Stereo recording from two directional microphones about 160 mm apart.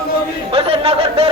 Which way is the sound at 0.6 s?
40° right (ahead or behind).